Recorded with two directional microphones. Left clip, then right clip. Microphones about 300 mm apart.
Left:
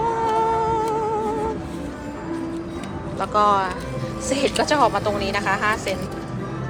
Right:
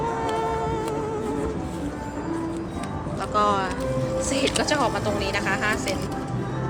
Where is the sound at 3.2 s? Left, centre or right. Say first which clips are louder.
Left 4 dB; centre.